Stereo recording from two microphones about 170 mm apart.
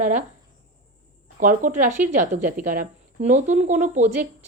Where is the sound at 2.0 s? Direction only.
50° right (ahead or behind).